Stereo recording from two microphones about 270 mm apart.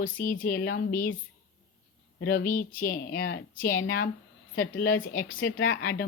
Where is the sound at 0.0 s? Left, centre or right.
Left.